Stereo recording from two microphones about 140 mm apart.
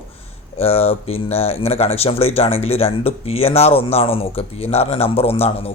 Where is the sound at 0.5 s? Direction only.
45° left (ahead or behind).